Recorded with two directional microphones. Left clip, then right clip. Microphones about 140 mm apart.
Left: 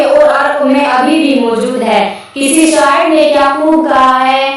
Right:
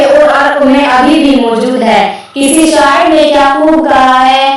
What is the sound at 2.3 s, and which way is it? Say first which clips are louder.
Child singing: right 2 dB; 30° right (ahead or behind).